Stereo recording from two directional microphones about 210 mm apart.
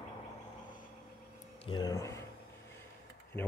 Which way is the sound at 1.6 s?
20° left (ahead or behind).